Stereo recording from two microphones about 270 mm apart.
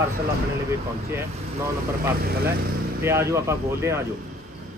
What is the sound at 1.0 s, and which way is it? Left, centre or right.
Speech, centre.